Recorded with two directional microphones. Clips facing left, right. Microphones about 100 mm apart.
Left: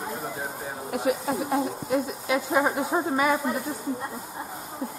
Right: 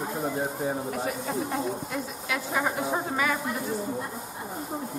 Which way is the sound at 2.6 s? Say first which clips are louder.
Left 3 dB; 20° left (ahead or behind).